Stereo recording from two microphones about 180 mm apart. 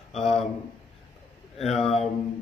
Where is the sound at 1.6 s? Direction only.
35° left (ahead or behind).